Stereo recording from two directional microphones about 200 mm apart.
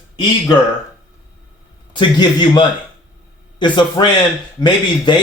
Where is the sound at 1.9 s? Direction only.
25° left (ahead or behind).